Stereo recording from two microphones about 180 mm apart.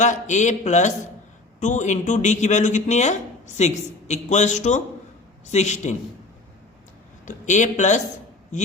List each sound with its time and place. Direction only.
0.0 s speech: 40° left (ahead or behind)
7.3 s speech: 40° left (ahead or behind)